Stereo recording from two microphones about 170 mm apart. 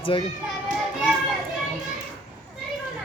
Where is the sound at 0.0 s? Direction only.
30° left (ahead or behind).